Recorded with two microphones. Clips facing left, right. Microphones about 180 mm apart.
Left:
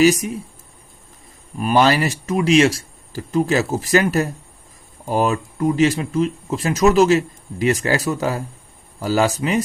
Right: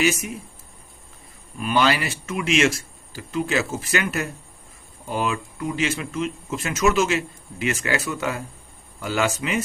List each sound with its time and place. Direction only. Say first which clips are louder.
0.0 s speech: left 8 dB; 35° left (ahead or behind)
1.5 s speech: left 5 dB; 40° left (ahead or behind)